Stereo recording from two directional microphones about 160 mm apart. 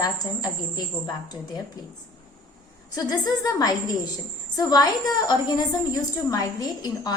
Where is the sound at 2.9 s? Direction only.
25° left (ahead or behind).